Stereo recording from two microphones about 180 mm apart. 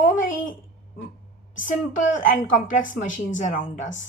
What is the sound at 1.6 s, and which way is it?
A woman's voice, 45° left (ahead or behind).